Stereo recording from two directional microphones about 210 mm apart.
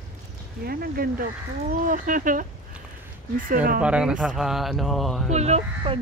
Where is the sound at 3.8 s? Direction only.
5° right (ahead or behind).